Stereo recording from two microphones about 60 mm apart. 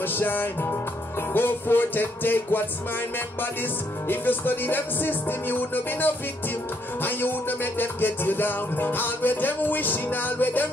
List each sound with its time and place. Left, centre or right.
0.0 s music: left
4.1 s music: left